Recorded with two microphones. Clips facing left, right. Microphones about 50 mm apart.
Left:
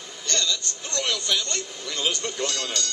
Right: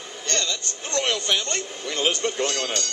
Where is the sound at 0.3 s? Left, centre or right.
Right.